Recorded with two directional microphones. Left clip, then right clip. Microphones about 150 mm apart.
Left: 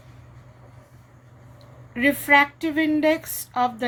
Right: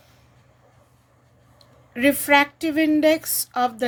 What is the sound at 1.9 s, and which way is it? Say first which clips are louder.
Speech: even; 90° right.